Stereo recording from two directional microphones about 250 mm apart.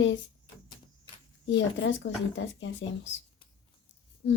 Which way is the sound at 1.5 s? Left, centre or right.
Left.